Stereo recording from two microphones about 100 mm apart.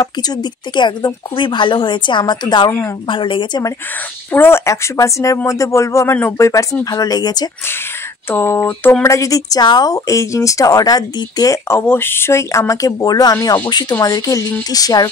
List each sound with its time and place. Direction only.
0.0 s a woman's voice: 45° left (ahead or behind)
3.1 s a woman's voice: 55° left (ahead or behind)
4.3 s a woman's voice: 25° left (ahead or behind); by 7.4 s 40° left (ahead or behind)
8.3 s a woman's voice: 25° left (ahead or behind)
11.8 s a woman's voice: 20° left (ahead or behind); by 15.0 s 40° left (ahead or behind)